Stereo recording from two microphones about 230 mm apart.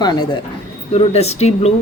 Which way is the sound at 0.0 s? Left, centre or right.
Centre.